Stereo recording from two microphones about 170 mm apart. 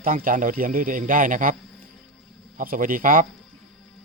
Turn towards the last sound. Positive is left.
turn(degrees=-55)  # may be behind; listen again after turning